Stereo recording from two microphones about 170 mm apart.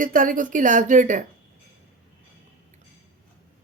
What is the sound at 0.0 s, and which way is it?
Speech, 55° right (ahead or behind).